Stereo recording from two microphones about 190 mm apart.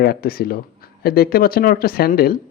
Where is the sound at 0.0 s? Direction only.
55° left (ahead or behind).